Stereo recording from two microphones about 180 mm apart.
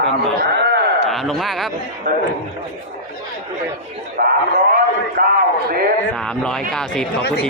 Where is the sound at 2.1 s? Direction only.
70° right (ahead or behind).